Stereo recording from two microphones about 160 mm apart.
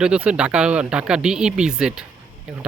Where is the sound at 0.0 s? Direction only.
5° right (ahead or behind).